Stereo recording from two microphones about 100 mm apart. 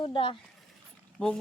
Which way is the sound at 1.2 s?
10° left (ahead or behind).